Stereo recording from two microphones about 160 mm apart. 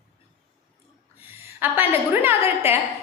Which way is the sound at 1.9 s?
15° right (ahead or behind).